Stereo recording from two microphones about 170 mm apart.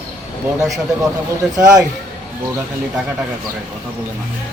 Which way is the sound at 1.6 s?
20° right (ahead or behind).